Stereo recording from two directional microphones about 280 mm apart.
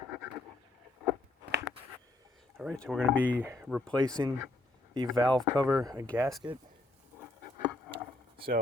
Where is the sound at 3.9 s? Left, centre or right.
Centre.